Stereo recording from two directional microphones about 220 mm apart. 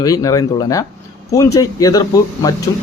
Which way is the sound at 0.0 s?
15° left (ahead or behind).